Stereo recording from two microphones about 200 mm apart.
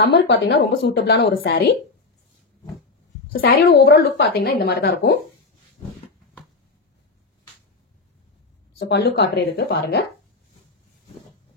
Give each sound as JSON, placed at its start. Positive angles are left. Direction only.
{"t": 0.1, "sound": "a woman's voice", "side_deg": 60}
{"t": 3.4, "sound": "a woman's voice", "side_deg": 50}
{"t": 8.7, "sound": "a woman's voice", "side_deg": 55}